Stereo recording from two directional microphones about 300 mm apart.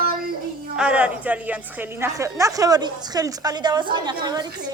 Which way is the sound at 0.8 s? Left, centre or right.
Centre.